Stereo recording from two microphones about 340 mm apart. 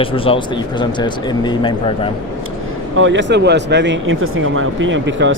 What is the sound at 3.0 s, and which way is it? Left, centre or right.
Speech, right.